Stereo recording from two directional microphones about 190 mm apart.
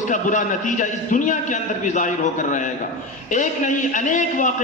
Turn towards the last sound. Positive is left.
turn(degrees=40)  # may be behind; listen again after turning